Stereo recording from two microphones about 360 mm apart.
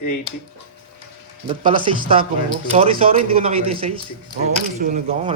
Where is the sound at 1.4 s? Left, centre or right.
Centre.